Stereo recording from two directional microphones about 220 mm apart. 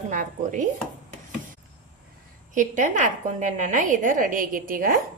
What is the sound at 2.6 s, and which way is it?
A woman's voice, 35° right (ahead or behind).